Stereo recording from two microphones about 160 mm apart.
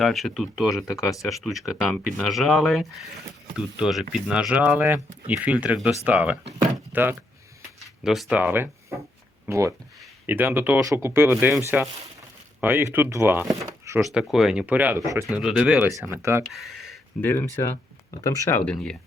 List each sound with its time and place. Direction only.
0.0 s speech: centre (ahead or behind)
8.0 s speech: centre (ahead or behind)
13.5 s a sound: 20° right (ahead or behind)
14.0 s speech: centre (ahead or behind); by 15.3 s 20° right (ahead or behind)
15.3 s speech: 5° right (ahead or behind)
15.9 s speech: 20° right (ahead or behind)
16.5 s speech: centre (ahead or behind)
17.2 s speech: 15° left (ahead or behind)
18.6 s speech: 5° left (ahead or behind)